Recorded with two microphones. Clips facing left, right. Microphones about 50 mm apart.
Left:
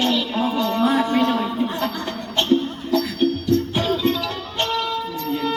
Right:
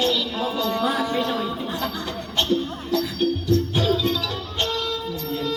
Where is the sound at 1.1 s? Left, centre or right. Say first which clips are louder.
Left 4 dB; left.